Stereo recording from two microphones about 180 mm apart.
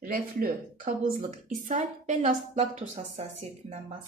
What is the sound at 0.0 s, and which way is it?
A woman's voice, 50° right (ahead or behind).